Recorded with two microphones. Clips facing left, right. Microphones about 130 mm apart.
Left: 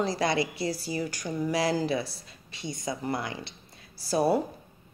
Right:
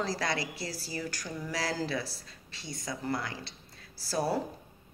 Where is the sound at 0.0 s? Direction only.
20° left (ahead or behind).